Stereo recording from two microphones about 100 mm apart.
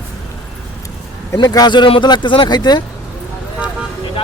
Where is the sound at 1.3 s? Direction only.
40° left (ahead or behind).